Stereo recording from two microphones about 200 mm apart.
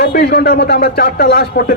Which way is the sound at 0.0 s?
55° left (ahead or behind).